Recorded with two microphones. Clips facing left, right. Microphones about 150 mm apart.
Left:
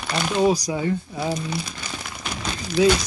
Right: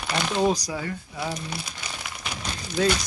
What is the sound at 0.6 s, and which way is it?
Speech, 20° left (ahead or behind).